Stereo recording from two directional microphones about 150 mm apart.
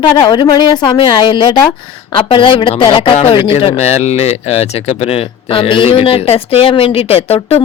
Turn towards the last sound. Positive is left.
turn(degrees=40)  # may be behind; listen again after turning